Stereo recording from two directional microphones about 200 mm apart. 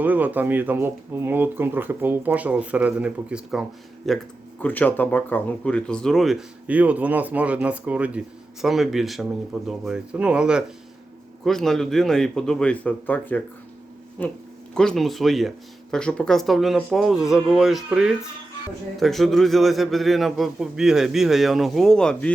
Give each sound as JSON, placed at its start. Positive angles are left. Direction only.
{"t": 0.0, "sound": "speech", "side_deg": -10}
{"t": 14.8, "sound": "speech", "side_deg": 0}